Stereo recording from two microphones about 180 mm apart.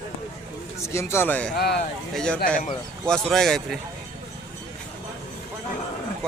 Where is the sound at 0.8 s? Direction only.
15° left (ahead or behind).